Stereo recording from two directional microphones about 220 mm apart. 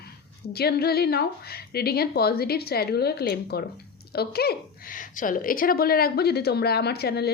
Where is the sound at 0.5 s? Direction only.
45° left (ahead or behind).